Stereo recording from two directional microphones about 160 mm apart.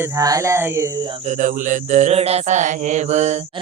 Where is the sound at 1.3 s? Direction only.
55° right (ahead or behind).